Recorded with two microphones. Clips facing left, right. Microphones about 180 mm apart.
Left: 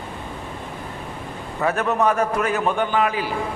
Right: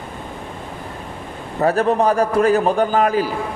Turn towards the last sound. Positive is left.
turn(degrees=-40)  # may be behind; listen again after turning